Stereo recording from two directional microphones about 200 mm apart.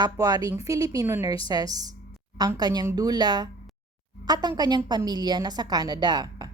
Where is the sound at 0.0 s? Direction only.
20° right (ahead or behind).